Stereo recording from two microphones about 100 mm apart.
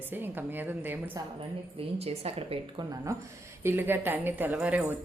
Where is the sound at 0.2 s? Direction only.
20° right (ahead or behind).